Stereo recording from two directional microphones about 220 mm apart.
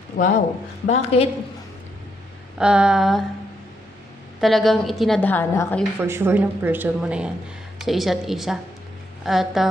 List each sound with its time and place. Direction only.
0.2 s a man's voice: 40° left (ahead or behind)
0.8 s a woman's voice: 25° left (ahead or behind)
2.6 s a woman's voice: 5° right (ahead or behind)
4.4 s a woman's voice: centre (ahead or behind)
5.9 s a woman's voice: 10° right (ahead or behind)